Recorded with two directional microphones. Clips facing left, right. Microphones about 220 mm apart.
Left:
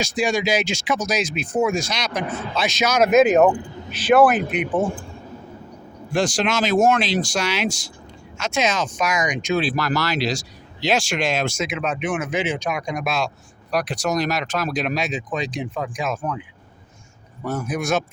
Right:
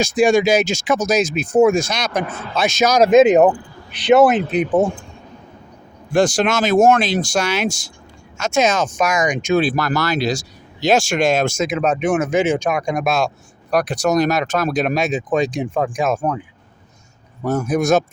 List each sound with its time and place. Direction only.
0.0 s speech: 50° right (ahead or behind); by 3.5 s 20° right (ahead or behind)
3.5 s a sound: 20° left (ahead or behind)
4.1 s speech: 25° right (ahead or behind)
4.5 s speech: 40° right (ahead or behind)
6.1 s speech: 50° right (ahead or behind)
17.4 s speech: 45° right (ahead or behind)